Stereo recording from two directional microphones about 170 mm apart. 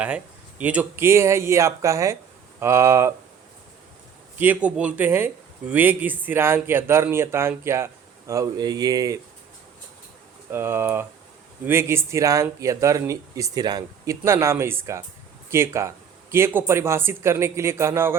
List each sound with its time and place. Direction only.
0.6 s speech: 10° right (ahead or behind)
4.4 s speech: 10° right (ahead or behind)
10.5 s speech: 15° right (ahead or behind)